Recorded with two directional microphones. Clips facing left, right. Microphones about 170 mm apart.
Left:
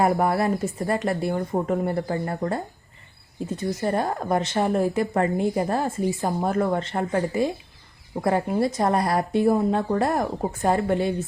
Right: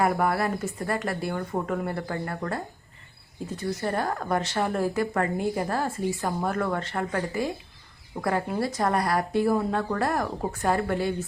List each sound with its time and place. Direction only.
0.0 s a woman's voice: 25° left (ahead or behind)
3.8 s a woman's voice: 20° left (ahead or behind)